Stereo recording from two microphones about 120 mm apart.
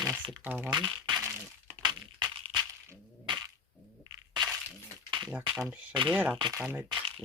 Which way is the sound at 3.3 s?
40° right (ahead or behind).